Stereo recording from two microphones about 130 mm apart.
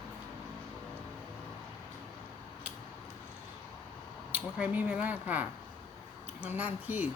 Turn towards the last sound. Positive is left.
turn(degrees=-15)  # may be behind; listen again after turning